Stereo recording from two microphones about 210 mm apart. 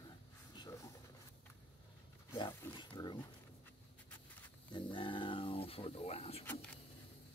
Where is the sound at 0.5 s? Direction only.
15° left (ahead or behind).